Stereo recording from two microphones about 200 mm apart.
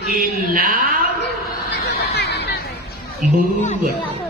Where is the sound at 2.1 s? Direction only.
55° left (ahead or behind).